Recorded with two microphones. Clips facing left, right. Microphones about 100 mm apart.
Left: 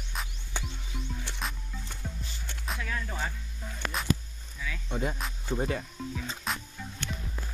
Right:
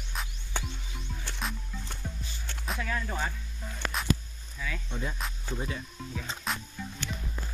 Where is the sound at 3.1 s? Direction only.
Centre (ahead or behind).